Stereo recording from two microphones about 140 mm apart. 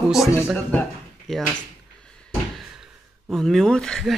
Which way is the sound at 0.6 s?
10° left (ahead or behind).